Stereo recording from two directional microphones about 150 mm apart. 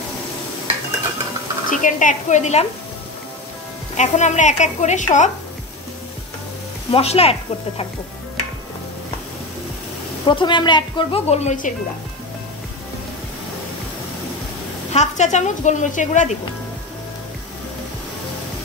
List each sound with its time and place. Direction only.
1.7 s speech: 60° left (ahead or behind)
3.9 s a woman's voice: 55° left (ahead or behind)
6.9 s a woman's voice: 40° left (ahead or behind)
10.2 s a woman's voice: 30° left (ahead or behind)
11.2 s a woman's voice: 45° left (ahead or behind)
14.9 s a woman's voice: 50° left (ahead or behind)